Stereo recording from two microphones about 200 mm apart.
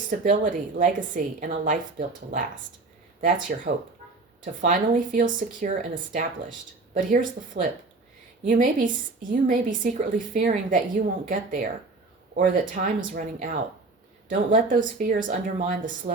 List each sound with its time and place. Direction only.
0.1 s a woman's voice: 40° right (ahead or behind)
4.6 s a woman's voice: 40° right (ahead or behind)